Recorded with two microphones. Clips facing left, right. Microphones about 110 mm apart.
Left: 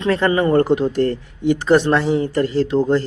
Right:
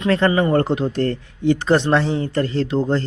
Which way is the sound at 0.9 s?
20° left (ahead or behind).